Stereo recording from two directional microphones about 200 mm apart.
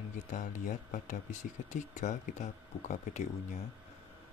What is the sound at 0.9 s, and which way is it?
Speech, 40° left (ahead or behind).